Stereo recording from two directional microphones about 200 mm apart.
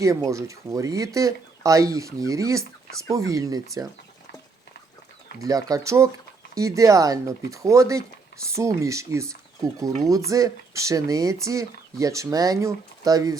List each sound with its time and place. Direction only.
0.0 s speech: 15° right (ahead or behind)
5.4 s speech: 20° right (ahead or behind)